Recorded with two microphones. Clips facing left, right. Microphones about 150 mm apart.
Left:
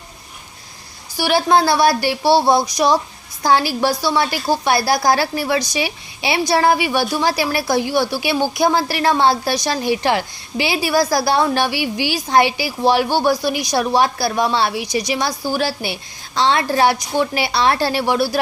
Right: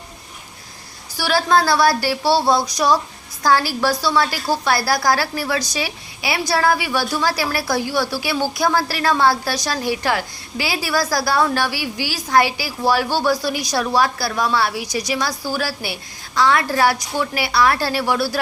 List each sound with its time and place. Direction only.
1.1 s a woman's voice: 20° left (ahead or behind)